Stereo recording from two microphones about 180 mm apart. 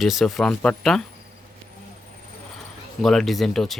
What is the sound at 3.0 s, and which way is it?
Speech, centre (ahead or behind).